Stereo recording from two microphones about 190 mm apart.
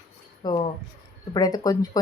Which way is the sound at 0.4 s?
20° left (ahead or behind).